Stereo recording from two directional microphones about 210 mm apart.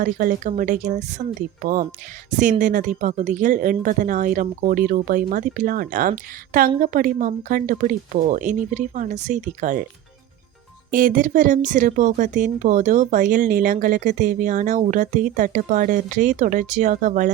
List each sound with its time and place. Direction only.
0.0 s speech: 40° right (ahead or behind)
10.9 s speech: 40° right (ahead or behind)